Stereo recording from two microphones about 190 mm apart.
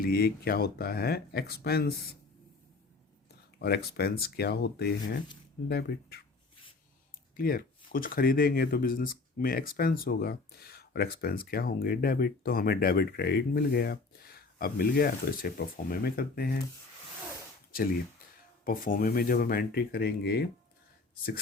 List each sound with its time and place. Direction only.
0.0 s speech: 55° left (ahead or behind)
3.6 s speech: 55° left (ahead or behind)
7.3 s speech: 50° left (ahead or behind)
18.6 s speech: 45° left (ahead or behind)